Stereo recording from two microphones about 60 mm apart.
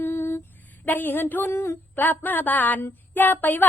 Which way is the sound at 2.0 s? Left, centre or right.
Left.